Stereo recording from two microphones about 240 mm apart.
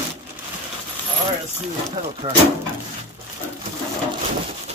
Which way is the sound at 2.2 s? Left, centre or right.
Right.